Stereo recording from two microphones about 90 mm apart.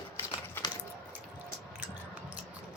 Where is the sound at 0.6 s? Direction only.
25° left (ahead or behind).